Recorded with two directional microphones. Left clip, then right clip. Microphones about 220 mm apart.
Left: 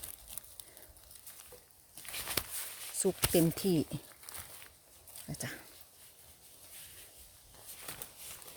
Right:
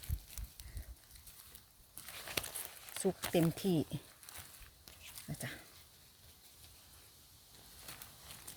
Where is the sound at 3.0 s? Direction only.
25° left (ahead or behind).